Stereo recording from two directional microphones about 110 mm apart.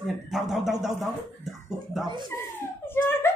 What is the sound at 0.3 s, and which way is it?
Speech, 5° right (ahead or behind).